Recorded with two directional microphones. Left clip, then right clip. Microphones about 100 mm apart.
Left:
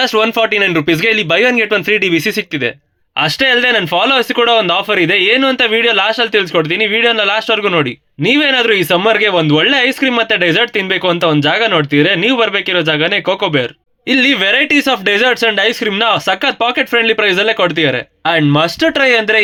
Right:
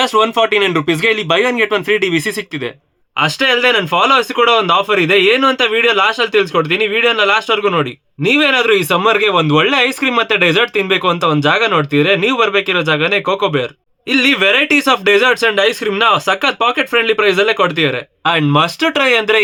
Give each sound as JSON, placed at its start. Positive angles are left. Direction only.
{"t": 0.0, "sound": "speech", "side_deg": 20}
{"t": 14.1, "sound": "speech", "side_deg": 30}